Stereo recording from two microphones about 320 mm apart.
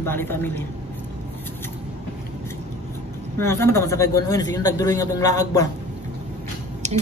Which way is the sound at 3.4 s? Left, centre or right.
Centre.